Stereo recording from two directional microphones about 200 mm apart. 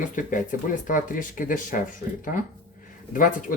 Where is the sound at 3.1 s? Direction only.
45° left (ahead or behind).